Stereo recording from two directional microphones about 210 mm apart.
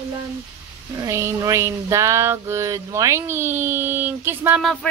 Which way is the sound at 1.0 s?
15° right (ahead or behind).